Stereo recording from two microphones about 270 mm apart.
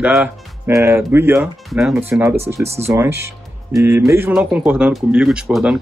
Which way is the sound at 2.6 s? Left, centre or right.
Right.